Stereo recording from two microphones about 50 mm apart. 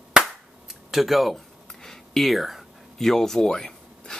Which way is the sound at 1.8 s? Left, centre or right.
Centre.